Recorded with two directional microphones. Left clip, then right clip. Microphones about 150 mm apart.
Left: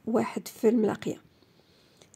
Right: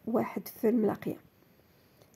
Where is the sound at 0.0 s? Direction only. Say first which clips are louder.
Left 3 dB; 30° left (ahead or behind).